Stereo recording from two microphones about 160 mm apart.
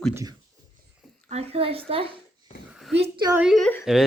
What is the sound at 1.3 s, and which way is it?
Speech, 40° right (ahead or behind).